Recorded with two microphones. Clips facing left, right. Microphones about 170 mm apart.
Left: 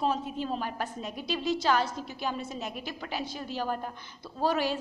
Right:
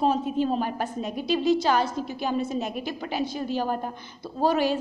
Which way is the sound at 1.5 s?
20° right (ahead or behind).